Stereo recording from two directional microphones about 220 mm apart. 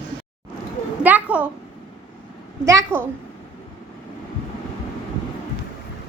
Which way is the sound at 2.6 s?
10° right (ahead or behind).